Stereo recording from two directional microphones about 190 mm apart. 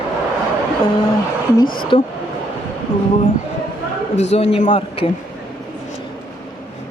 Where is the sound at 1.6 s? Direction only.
50° left (ahead or behind).